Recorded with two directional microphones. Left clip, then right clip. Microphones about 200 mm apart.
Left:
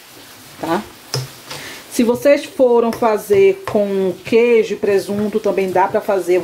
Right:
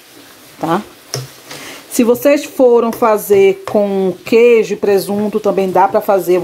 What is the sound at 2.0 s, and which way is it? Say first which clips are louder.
Speech: right 2 dB; 30° right (ahead or behind).